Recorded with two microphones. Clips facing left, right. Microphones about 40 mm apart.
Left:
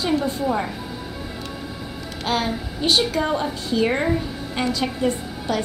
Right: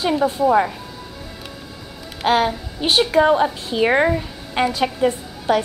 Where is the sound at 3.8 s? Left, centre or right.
Right.